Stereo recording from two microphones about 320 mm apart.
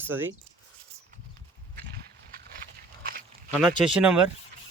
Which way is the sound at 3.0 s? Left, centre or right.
Right.